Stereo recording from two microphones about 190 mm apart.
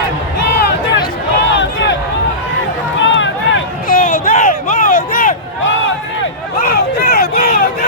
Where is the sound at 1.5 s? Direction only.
70° left (ahead or behind).